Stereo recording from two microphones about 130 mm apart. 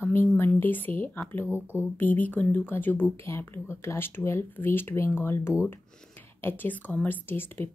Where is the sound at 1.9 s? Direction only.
15° left (ahead or behind).